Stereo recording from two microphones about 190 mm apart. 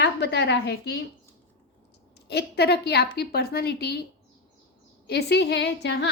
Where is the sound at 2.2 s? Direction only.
60° left (ahead or behind).